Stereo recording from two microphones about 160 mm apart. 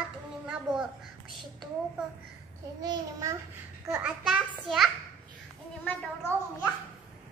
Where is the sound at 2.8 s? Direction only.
25° right (ahead or behind).